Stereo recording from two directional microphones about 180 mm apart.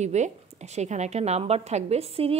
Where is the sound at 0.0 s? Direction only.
40° right (ahead or behind).